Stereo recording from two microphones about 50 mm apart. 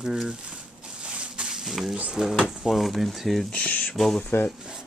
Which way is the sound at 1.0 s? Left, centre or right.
Right.